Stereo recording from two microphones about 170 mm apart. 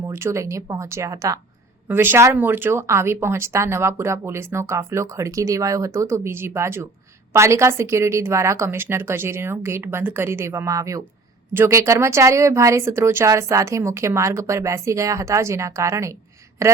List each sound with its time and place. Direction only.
0.1 s speech: 15° right (ahead or behind)